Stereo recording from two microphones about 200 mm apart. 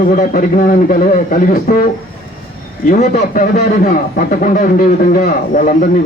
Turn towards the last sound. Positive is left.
turn(degrees=40)  # may be behind; listen again after turning